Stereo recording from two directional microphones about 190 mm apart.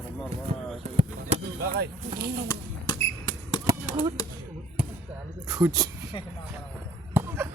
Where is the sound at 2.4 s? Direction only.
25° left (ahead or behind).